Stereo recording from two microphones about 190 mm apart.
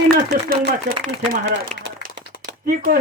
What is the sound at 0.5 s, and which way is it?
Speech, 50° right (ahead or behind).